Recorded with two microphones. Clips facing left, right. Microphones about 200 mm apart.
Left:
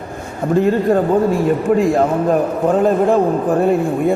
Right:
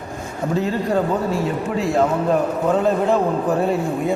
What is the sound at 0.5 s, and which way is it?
A man's voice, 50° left (ahead or behind).